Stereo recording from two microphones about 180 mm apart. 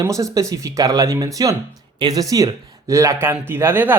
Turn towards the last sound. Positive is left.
turn(degrees=-10)  # may be behind; listen again after turning